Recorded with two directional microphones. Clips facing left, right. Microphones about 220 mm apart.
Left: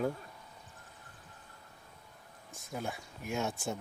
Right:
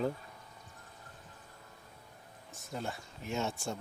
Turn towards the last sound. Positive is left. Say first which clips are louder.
# even
turn(degrees=15)  # may be behind; listen again after turning